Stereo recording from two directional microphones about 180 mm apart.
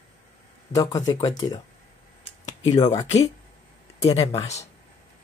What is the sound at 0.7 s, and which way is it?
Speech, 20° left (ahead or behind).